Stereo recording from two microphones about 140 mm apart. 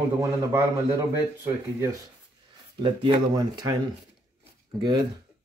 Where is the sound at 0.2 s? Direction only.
20° right (ahead or behind).